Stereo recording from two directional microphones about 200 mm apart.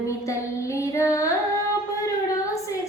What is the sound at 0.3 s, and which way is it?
Child singing, 15° left (ahead or behind).